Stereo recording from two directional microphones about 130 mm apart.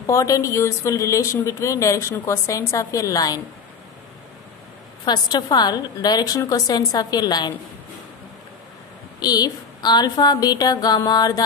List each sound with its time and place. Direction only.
0.0 s a woman's voice: 25° left (ahead or behind)
5.0 s a woman's voice: 35° left (ahead or behind)
9.2 s a woman's voice: 30° left (ahead or behind)